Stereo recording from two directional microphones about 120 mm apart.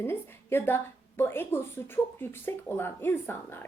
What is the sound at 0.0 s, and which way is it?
A woman's voice, 20° left (ahead or behind).